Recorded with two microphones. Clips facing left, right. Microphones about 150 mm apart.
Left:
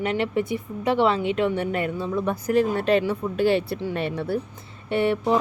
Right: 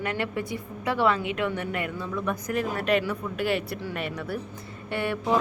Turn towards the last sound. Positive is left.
turn(degrees=25)  # may be behind; listen again after turning